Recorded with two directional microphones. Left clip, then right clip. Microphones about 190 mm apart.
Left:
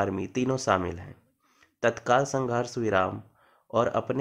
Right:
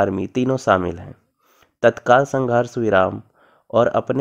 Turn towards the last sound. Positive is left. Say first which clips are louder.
# right 9 dB
turn(degrees=-45)  # may be behind; listen again after turning